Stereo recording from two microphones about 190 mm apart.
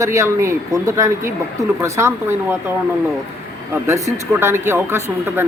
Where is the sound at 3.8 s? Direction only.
15° right (ahead or behind).